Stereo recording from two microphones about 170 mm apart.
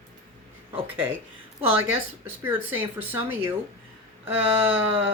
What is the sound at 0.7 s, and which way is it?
Speech, 35° right (ahead or behind).